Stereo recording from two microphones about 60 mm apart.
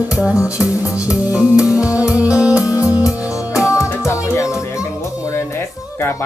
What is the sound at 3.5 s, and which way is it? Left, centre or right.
Music, left.